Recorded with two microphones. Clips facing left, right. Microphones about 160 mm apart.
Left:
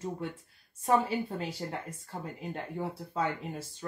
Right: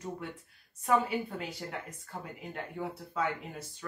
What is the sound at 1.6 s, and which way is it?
Speech, 30° left (ahead or behind).